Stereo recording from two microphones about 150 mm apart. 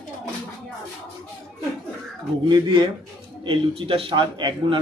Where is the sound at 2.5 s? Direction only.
30° right (ahead or behind).